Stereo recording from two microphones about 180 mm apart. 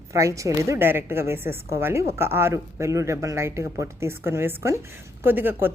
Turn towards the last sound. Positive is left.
turn(degrees=-10)  # may be behind; listen again after turning